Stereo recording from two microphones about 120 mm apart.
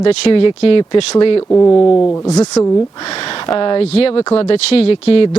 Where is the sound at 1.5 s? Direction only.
20° left (ahead or behind).